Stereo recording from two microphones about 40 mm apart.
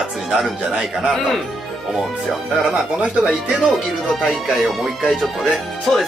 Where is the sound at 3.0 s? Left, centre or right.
Right.